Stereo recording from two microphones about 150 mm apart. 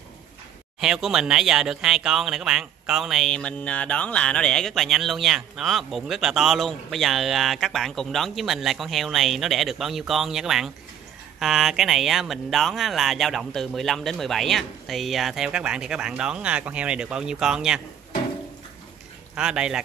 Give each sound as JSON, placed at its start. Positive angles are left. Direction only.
{"t": 0.7, "sound": "speech", "side_deg": -5}
{"t": 19.3, "sound": "speech", "side_deg": -5}